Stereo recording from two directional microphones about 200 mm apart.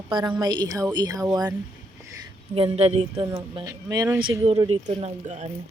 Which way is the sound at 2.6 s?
30° right (ahead or behind).